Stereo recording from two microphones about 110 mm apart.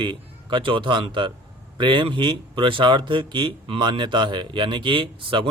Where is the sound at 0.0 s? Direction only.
50° right (ahead or behind).